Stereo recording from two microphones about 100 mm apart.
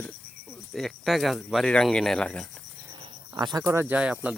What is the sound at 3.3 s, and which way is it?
Speech, 45° right (ahead or behind).